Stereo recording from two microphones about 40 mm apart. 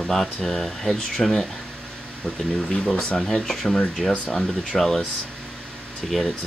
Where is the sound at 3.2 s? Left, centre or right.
Centre.